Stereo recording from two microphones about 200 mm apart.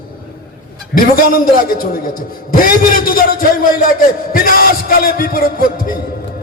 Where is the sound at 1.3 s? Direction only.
45° left (ahead or behind).